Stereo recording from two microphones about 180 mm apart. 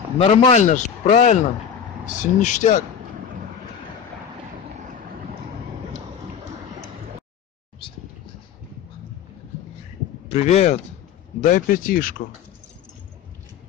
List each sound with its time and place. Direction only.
0.2 s a man's voice: 35° left (ahead or behind)
10.2 s speech: 35° left (ahead or behind)